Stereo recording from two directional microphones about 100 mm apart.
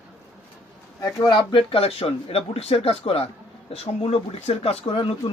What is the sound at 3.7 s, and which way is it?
Speech, 90° left.